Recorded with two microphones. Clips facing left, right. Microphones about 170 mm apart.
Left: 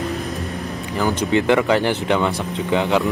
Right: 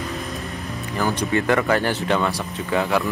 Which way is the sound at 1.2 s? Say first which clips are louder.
Left 4 dB; 20° left (ahead or behind).